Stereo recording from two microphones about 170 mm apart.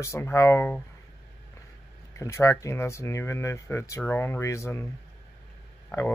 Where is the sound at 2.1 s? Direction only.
15° left (ahead or behind).